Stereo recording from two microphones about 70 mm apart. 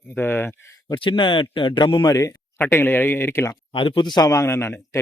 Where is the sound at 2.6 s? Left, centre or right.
Left.